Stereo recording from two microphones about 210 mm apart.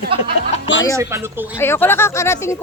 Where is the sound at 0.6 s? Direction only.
60° left (ahead or behind).